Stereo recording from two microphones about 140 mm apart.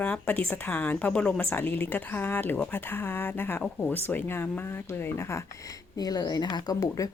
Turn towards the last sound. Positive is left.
turn(degrees=25)  # may be behind; listen again after turning